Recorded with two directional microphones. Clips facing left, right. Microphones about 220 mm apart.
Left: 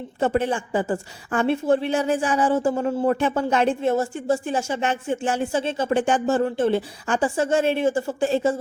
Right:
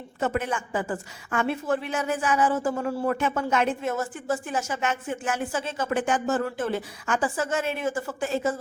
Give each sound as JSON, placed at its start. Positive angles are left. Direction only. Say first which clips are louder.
{"t": 0.2, "sound": "a woman's voice", "louder": "left 5 dB", "side_deg": 30}